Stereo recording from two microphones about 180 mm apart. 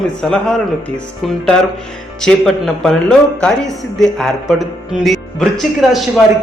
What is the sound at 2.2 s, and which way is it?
A man's voice, centre (ahead or behind).